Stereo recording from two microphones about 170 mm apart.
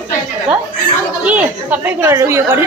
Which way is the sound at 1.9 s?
15° right (ahead or behind).